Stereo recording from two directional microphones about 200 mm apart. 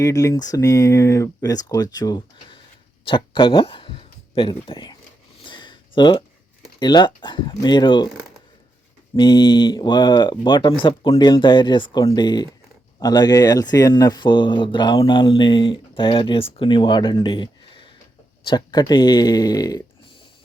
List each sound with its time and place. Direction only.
0.0 s speech: 15° left (ahead or behind)
5.4 s a sound: 25° left (ahead or behind)
6.7 s speech: 20° left (ahead or behind)
9.1 s speech: 20° left (ahead or behind)